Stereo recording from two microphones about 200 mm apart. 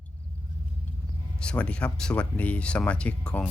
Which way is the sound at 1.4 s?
5° left (ahead or behind).